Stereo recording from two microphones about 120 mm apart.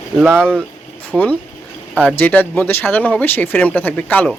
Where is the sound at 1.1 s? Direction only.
5° right (ahead or behind).